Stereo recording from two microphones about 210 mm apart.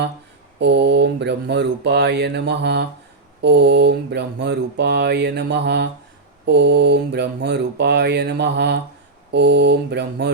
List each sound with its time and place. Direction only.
0.6 s mantra: 55° right (ahead or behind)